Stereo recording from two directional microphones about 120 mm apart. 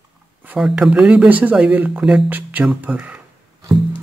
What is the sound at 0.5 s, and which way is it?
Speech, 5° right (ahead or behind).